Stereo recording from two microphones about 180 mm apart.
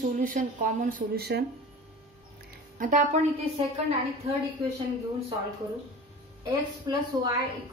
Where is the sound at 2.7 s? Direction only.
45° right (ahead or behind).